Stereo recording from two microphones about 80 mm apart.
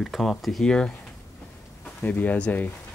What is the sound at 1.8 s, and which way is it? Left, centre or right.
Speech, left.